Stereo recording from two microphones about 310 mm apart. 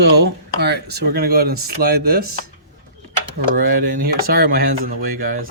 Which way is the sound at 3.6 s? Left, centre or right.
Right.